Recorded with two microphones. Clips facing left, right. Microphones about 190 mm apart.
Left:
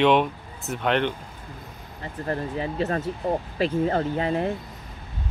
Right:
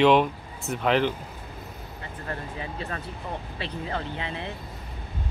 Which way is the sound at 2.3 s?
35° left (ahead or behind).